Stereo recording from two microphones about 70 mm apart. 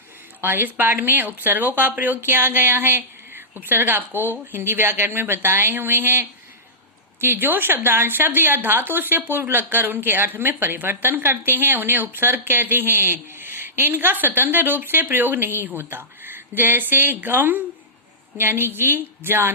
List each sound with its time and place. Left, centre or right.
0.4 s a woman's voice: right